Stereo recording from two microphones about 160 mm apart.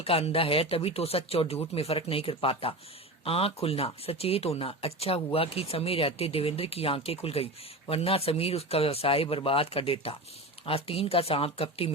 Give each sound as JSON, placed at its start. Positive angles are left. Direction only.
{"t": 0.0, "sound": "speech", "side_deg": 40}